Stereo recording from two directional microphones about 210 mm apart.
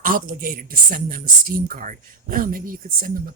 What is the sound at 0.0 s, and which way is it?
Speech, 40° right (ahead or behind).